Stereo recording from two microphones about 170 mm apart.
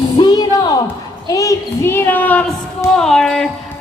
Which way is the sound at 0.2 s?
25° left (ahead or behind).